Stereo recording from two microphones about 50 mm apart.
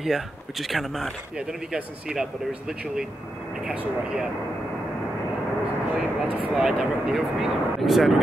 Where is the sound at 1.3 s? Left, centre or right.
Centre.